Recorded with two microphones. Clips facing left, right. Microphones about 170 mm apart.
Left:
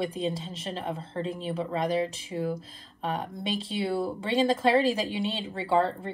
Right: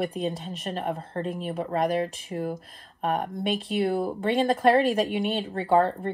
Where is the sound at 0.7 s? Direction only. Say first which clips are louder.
Right 3 dB; 45° right (ahead or behind).